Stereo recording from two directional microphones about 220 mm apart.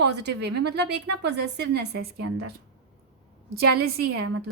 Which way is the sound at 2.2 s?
90° right.